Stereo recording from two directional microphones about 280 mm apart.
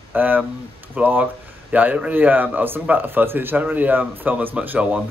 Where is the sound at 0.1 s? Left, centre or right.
Centre.